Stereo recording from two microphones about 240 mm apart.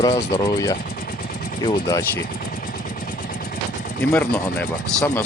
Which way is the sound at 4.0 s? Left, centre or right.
Centre.